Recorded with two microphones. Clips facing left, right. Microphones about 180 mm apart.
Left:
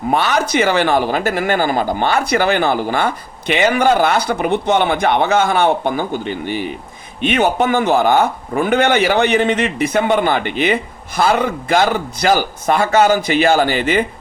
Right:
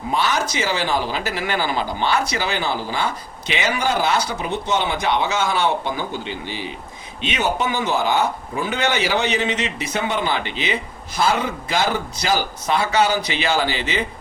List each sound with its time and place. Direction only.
0.1 s speech: 60° left (ahead or behind)